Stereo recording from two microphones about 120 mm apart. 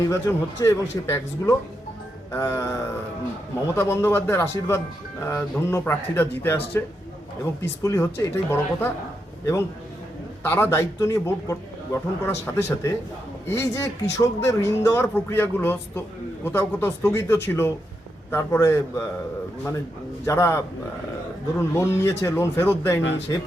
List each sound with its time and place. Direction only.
0.1 s speech: 25° left (ahead or behind)
10.4 s speech: 20° left (ahead or behind)
20.2 s speech: 25° left (ahead or behind)
21.6 s speech: 25° left (ahead or behind)